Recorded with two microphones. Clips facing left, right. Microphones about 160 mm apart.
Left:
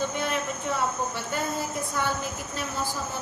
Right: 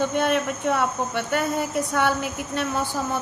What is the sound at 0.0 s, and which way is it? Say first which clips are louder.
Speech: right 6 dB; 65° right (ahead or behind).